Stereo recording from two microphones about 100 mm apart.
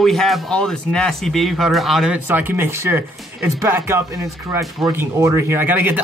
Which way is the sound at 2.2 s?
20° right (ahead or behind).